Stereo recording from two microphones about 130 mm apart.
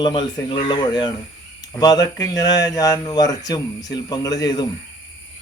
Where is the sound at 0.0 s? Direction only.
35° left (ahead or behind).